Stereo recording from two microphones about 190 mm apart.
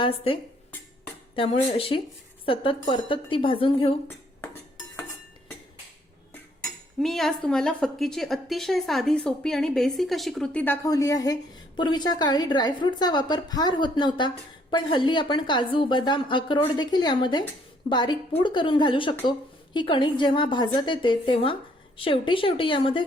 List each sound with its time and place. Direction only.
0.0 s a woman's voice: 30° left (ahead or behind)
1.4 s a woman's voice: 30° left (ahead or behind)
6.6 s speech: centre (ahead or behind)
10.8 s a woman's voice: 20° left (ahead or behind)